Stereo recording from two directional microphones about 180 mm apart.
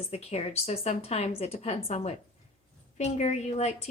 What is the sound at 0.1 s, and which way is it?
Speech, 35° left (ahead or behind).